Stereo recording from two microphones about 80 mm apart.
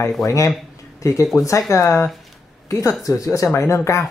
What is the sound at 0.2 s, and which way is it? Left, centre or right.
A man's voice, left.